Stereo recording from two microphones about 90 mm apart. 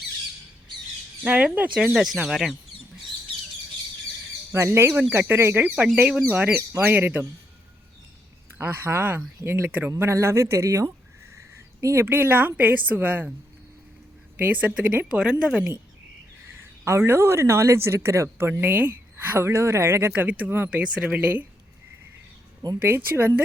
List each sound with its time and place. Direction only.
1.2 s a woman's voice: 15° right (ahead or behind)
4.5 s speech: 30° right (ahead or behind)
8.5 s speech: 25° right (ahead or behind)
10.0 s speech: 30° right (ahead or behind)
14.3 s a woman's voice: 20° right (ahead or behind)
16.8 s speech: 30° right (ahead or behind)
22.8 s speech: 25° right (ahead or behind)